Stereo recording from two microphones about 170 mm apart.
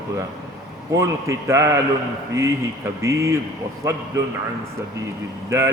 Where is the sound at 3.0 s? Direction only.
20° right (ahead or behind).